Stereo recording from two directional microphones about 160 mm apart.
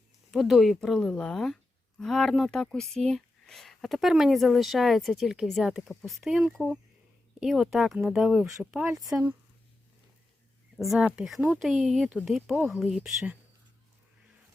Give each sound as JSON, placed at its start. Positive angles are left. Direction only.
{"t": 0.3, "sound": "speech", "side_deg": 0}
{"t": 10.8, "sound": "speech", "side_deg": 0}